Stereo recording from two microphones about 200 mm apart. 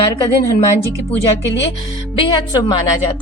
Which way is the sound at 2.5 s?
20° left (ahead or behind).